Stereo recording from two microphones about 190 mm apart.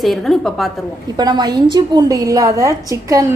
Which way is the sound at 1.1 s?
20° right (ahead or behind).